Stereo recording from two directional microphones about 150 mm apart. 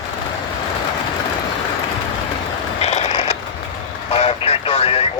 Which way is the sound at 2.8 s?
45° left (ahead or behind).